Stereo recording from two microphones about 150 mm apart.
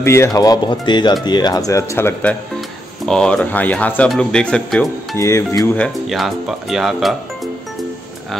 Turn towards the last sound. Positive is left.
turn(degrees=0)  # may be behind; listen again after turning